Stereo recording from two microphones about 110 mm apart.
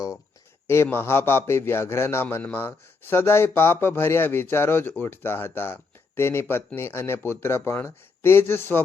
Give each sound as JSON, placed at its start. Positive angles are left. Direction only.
{"t": 0.7, "sound": "a man's voice", "side_deg": 20}